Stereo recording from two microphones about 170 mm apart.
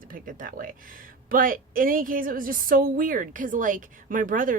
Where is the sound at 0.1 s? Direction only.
55° right (ahead or behind).